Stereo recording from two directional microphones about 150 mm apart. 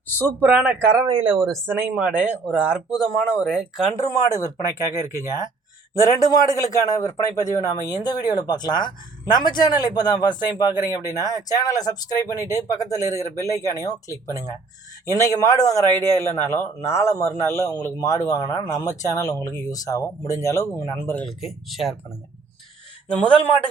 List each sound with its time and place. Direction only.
0.2 s speech: 10° right (ahead or behind)
1.0 s speech: 35° right (ahead or behind)
1.4 s speech: 20° right (ahead or behind); by 3.8 s 5° right (ahead or behind)
4.0 s speech: 20° left (ahead or behind)
5.9 s speech: 20° left (ahead or behind)
21.2 s speech: centre (ahead or behind)